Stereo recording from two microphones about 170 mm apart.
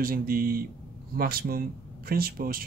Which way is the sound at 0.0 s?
60° right (ahead or behind).